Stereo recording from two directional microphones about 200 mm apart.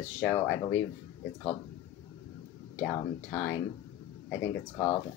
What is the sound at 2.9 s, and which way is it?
Speech, 10° left (ahead or behind).